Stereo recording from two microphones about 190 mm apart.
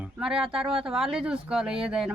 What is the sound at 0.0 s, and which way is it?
Speech, 5° right (ahead or behind).